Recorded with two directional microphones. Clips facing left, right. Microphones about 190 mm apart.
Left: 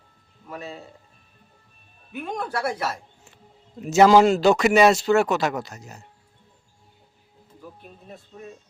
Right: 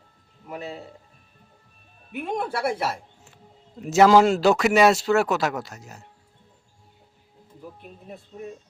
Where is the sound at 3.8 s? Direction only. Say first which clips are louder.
Left 1 dB; centre (ahead or behind).